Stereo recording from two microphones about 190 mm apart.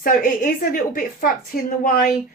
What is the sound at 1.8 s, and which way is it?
Speech, 50° left (ahead or behind).